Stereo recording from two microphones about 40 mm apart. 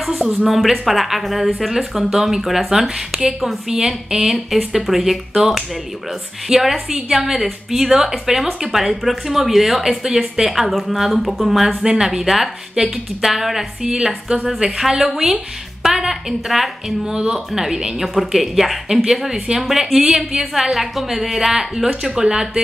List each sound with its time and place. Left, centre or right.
0.5 s speech: centre
2.7 s a woman's voice: centre
3.3 s a woman's voice: centre
6.5 s a woman's voice: centre
11.8 s a woman's voice: centre
17.1 s a woman's voice: centre